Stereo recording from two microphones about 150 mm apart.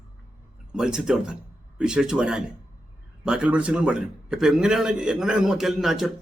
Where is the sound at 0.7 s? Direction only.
5° right (ahead or behind).